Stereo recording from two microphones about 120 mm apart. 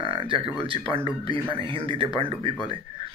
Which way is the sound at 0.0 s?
45° right (ahead or behind).